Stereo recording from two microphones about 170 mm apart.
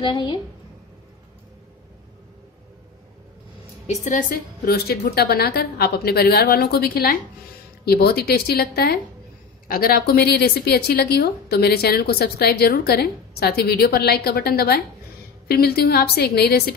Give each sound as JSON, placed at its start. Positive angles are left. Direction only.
{"t": 0.0, "sound": "a woman's voice", "side_deg": 25}
{"t": 3.8, "sound": "a woman's voice", "side_deg": 45}